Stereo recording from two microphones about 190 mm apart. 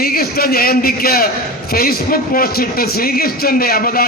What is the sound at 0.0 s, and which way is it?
A man's voice, 50° left (ahead or behind).